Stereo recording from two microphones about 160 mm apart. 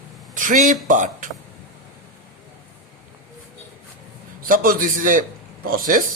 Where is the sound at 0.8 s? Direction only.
55° right (ahead or behind).